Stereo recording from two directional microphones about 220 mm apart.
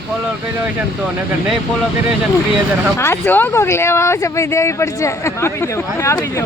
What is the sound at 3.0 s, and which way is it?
Speech, 10° left (ahead or behind).